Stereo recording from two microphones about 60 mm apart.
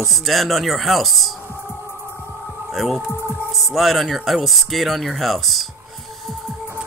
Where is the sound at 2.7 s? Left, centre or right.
Centre.